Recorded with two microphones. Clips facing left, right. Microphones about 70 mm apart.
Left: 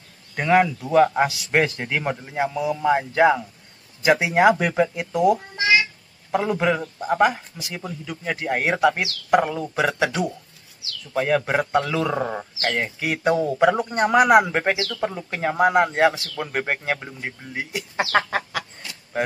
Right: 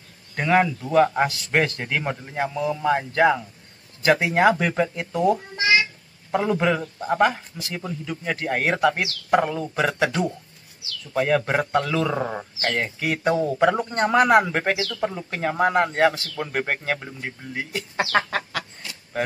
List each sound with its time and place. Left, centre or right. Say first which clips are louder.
0.4 s a man's voice: left 2 dB; centre